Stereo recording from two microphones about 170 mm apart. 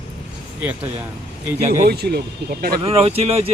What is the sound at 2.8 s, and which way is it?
Speech, 35° right (ahead or behind).